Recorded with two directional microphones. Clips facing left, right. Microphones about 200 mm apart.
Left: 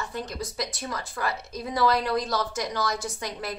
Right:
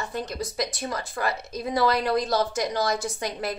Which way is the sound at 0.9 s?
25° right (ahead or behind).